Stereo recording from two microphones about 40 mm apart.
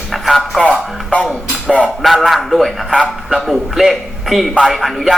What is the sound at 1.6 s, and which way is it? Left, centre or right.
Music, left.